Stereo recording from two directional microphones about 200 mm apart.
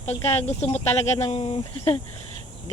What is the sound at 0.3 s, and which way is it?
Speech, 30° left (ahead or behind).